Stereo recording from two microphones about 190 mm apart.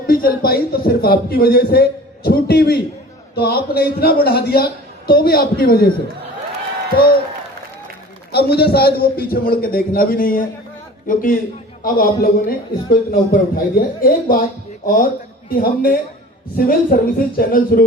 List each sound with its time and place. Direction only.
0.1 s a man's voice: 50° left (ahead or behind)
8.3 s a man's voice: 55° left (ahead or behind)